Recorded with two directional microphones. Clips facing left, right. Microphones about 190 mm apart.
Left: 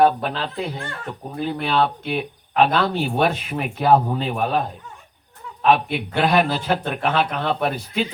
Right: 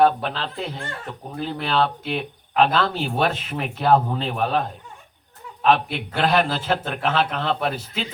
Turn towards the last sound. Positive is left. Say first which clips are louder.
# left 2 dB
turn(degrees=0)  # may be behind; listen again after turning